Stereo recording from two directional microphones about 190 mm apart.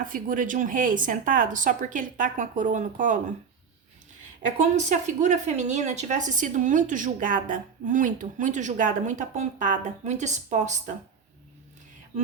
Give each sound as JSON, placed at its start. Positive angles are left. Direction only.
{"t": 0.0, "sound": "speech", "side_deg": -45}
{"t": 4.6, "sound": "a woman's voice", "side_deg": -40}